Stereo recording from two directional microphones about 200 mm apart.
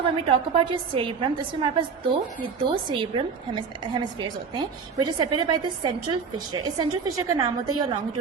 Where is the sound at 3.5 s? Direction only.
25° right (ahead or behind).